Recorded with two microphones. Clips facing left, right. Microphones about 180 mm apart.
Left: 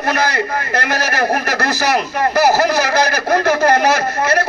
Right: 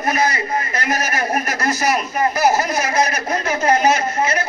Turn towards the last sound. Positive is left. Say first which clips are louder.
# left 3 dB
turn(degrees=65)  # may be behind; listen again after turning